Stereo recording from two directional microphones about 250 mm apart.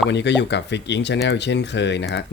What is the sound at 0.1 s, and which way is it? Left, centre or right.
Speech, left.